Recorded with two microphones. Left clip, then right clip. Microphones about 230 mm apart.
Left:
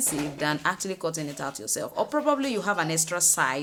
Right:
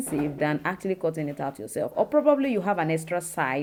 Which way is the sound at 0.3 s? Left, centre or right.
Centre.